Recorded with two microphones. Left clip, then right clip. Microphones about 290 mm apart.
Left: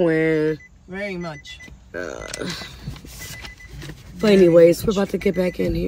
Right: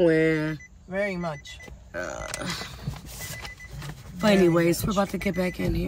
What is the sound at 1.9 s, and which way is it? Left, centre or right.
Speech, centre.